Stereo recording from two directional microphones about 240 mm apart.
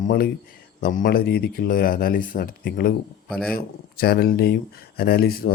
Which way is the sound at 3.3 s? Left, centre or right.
Centre.